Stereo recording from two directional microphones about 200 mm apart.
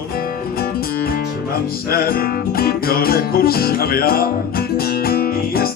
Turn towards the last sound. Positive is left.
turn(degrees=50)  # may be behind; listen again after turning